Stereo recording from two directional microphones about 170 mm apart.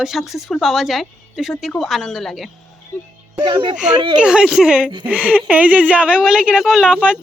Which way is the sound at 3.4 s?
25° right (ahead or behind).